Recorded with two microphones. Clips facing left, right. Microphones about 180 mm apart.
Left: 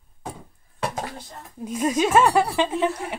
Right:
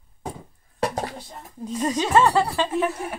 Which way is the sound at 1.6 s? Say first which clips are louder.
Left 2 dB; 10° left (ahead or behind).